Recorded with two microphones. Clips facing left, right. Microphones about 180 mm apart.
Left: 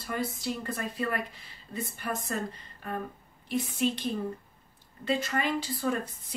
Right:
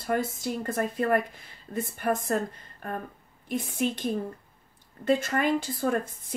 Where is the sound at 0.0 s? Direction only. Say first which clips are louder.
Right 5 dB; 50° right (ahead or behind).